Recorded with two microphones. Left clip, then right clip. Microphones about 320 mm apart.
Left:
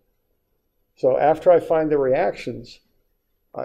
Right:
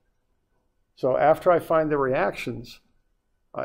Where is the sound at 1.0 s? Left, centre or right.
Right.